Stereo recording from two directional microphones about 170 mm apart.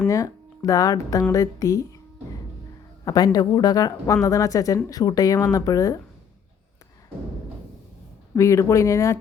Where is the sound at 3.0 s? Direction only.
20° left (ahead or behind).